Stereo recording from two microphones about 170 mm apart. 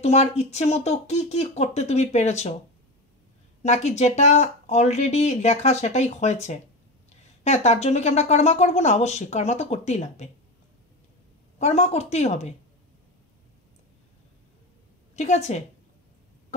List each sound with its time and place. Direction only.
0.0 s speech: 40° left (ahead or behind)
3.6 s speech: 40° left (ahead or behind)
11.5 s speech: 40° left (ahead or behind)
15.1 s speech: 40° left (ahead or behind)